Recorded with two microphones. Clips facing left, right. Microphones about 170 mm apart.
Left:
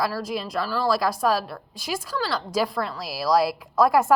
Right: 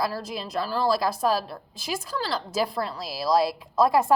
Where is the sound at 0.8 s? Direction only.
25° right (ahead or behind).